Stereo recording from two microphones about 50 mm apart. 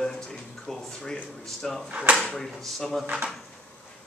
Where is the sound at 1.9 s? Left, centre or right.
Right.